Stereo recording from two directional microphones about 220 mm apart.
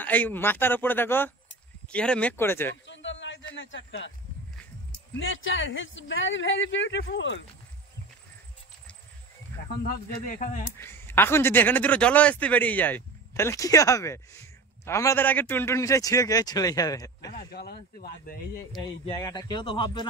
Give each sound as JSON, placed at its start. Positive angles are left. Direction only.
{"t": 0.0, "sound": "a man's voice", "side_deg": 10}
{"t": 2.9, "sound": "a sound", "side_deg": 55}
{"t": 3.5, "sound": "speech", "side_deg": 60}
{"t": 5.2, "sound": "speech", "side_deg": 60}
{"t": 9.8, "sound": "speech", "side_deg": 40}
{"t": 10.8, "sound": "a man's voice", "side_deg": 10}
{"t": 17.3, "sound": "speech", "side_deg": 45}
{"t": 18.8, "sound": "speech", "side_deg": 20}